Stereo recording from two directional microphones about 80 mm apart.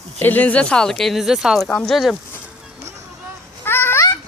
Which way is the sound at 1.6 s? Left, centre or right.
Centre.